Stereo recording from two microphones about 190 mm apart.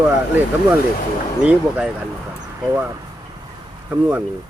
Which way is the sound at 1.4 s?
5° right (ahead or behind).